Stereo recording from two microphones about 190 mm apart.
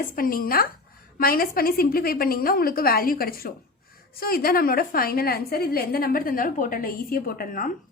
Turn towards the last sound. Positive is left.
turn(degrees=50)  # may be behind; listen again after turning